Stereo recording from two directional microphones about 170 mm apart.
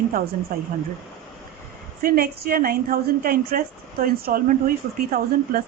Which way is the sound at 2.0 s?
60° right (ahead or behind).